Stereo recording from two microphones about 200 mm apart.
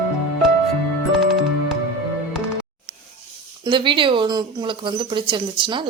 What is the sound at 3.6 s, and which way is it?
Speech, 25° right (ahead or behind).